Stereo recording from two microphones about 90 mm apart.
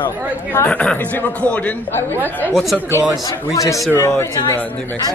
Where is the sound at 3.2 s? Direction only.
40° left (ahead or behind); by 5.0 s 20° left (ahead or behind).